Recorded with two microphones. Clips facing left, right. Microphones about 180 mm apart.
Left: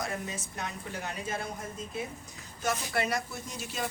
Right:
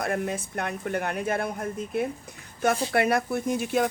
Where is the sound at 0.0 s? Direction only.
60° right (ahead or behind).